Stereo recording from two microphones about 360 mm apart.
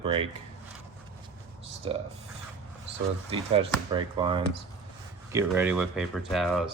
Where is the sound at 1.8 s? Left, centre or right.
Centre.